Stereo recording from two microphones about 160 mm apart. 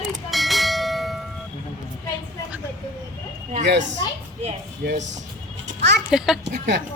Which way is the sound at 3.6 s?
90° right.